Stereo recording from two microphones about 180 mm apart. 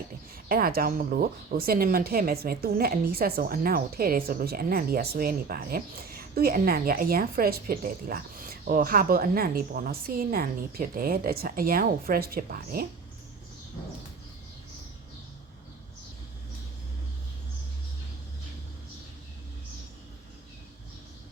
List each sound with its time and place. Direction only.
0.4 s speech: 55° right (ahead or behind)